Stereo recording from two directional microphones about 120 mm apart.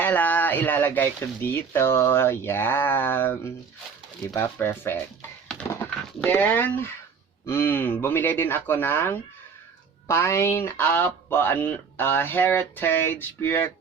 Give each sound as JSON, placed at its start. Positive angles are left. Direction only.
{"t": 0.0, "sound": "speech", "side_deg": 15}
{"t": 4.5, "sound": "speech", "side_deg": 20}
{"t": 6.2, "sound": "speech", "side_deg": 15}